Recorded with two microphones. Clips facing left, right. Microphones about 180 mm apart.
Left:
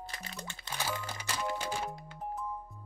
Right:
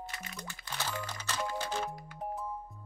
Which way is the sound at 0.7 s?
10° left (ahead or behind).